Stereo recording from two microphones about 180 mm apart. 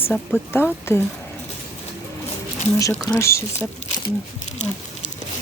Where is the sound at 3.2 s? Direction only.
15° left (ahead or behind).